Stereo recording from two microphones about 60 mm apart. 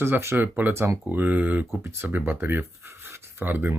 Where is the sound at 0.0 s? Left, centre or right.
Right.